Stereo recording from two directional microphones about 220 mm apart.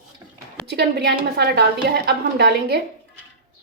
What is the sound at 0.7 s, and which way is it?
A woman's voice, 50° right (ahead or behind).